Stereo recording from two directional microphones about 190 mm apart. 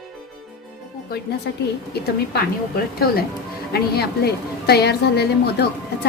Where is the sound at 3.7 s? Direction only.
55° left (ahead or behind).